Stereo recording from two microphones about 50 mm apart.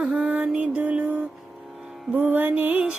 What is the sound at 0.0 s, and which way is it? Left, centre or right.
Music, centre.